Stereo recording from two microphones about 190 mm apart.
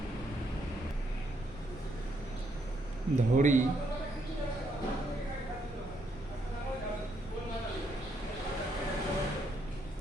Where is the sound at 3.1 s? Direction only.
40° right (ahead or behind).